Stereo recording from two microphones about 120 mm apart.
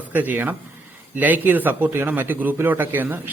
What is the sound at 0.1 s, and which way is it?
Speech, 15° right (ahead or behind).